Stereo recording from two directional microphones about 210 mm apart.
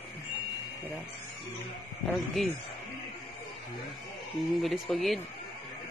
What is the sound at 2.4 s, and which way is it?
Speech, centre (ahead or behind).